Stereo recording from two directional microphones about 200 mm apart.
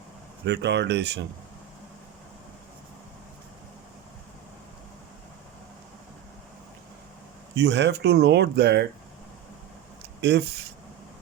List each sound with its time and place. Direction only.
0.4 s speech: 60° right (ahead or behind)
7.5 s speech: 60° right (ahead or behind)
10.2 s speech: 60° right (ahead or behind)